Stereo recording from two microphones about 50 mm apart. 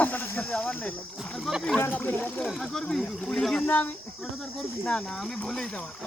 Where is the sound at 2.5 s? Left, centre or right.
Centre.